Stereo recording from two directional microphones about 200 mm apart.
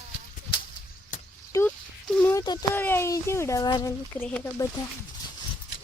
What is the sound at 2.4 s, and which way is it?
Speech, 20° left (ahead or behind).